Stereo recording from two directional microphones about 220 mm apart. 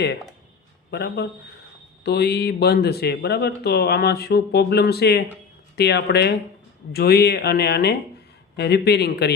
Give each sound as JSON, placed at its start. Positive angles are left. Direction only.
{"t": 0.9, "sound": "speech", "side_deg": 50}